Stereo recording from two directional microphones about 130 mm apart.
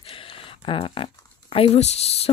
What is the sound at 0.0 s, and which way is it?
Speech, 45° left (ahead or behind).